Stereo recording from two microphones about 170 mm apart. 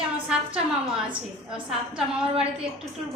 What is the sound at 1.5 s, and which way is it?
Speech, 30° right (ahead or behind).